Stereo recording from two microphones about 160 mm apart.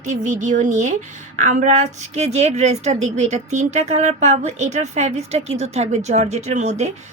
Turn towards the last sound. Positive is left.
turn(degrees=-45)  # may be behind; listen again after turning